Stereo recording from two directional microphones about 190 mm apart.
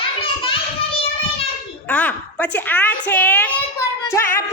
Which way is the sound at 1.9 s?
10° left (ahead or behind).